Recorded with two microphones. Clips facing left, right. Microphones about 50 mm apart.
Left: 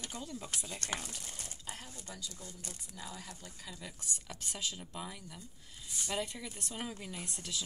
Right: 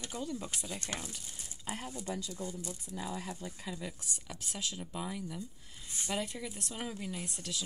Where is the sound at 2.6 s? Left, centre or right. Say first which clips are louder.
Right 7 dB; left.